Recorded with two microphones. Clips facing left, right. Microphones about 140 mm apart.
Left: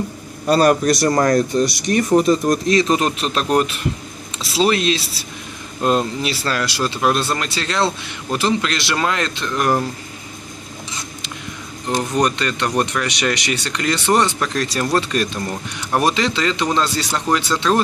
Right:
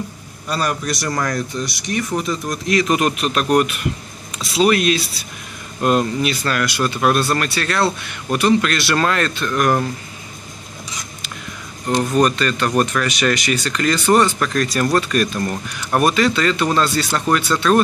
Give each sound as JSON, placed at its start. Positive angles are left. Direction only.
{"t": 0.5, "sound": "speech", "side_deg": 35}
{"t": 5.8, "sound": "speech", "side_deg": -10}
{"t": 6.4, "sound": "speech", "side_deg": 30}
{"t": 11.9, "sound": "speech", "side_deg": 20}